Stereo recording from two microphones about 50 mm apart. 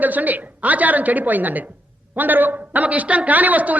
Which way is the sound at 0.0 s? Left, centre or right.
Right.